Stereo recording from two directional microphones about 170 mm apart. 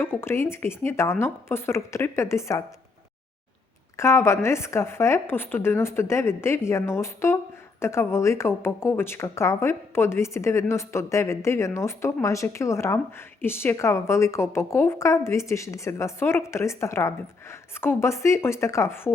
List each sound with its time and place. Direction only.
0.0 s speech: 15° left (ahead or behind)
3.9 s speech: 15° left (ahead or behind)